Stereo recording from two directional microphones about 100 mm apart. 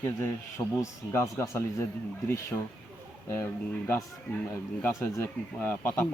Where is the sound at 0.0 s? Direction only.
25° left (ahead or behind).